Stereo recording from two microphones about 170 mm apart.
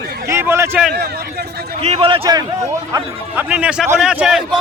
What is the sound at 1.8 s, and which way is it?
Speech, 35° right (ahead or behind).